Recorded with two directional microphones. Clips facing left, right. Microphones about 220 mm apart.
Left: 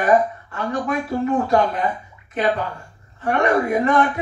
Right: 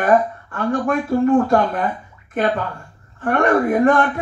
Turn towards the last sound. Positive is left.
turn(degrees=-50)  # may be behind; listen again after turning